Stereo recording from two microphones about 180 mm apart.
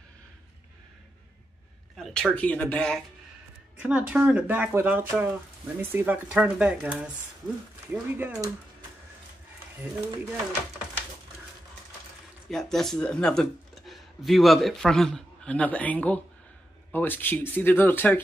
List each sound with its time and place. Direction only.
2.0 s speech: centre (ahead or behind)
3.7 s speech: 10° right (ahead or behind)
12.4 s speech: centre (ahead or behind)